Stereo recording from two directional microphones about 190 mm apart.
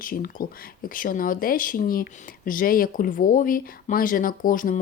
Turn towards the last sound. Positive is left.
turn(degrees=45)  # may be behind; listen again after turning